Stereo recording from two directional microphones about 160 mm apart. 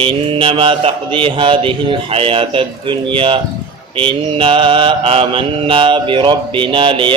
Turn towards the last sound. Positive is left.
turn(degrees=-30)  # may be behind; listen again after turning